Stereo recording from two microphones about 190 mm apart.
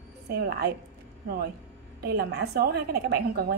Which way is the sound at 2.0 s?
55° right (ahead or behind).